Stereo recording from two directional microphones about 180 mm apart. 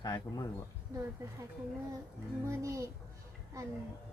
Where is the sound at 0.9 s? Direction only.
15° right (ahead or behind).